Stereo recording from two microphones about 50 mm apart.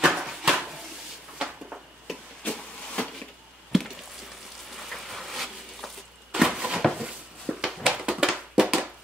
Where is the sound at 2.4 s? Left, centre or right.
Left.